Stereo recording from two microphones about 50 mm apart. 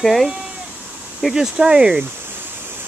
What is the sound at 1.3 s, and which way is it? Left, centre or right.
Speech, centre.